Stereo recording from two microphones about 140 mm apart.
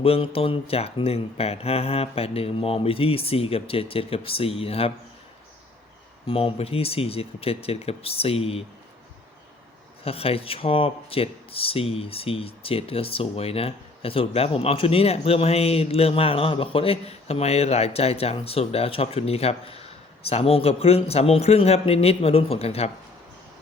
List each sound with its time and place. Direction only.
0.0 s speech: 45° left (ahead or behind)
6.2 s speech: 40° left (ahead or behind)
10.0 s speech: 45° left (ahead or behind)